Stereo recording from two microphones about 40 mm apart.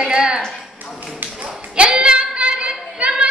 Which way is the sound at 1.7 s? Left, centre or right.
Right.